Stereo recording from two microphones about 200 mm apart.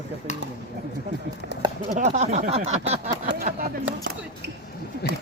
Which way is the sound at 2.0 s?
35° right (ahead or behind).